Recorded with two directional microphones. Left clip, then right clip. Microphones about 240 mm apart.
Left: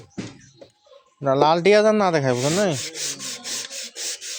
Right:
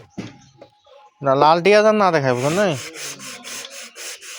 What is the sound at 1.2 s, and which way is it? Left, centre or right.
Speech, centre.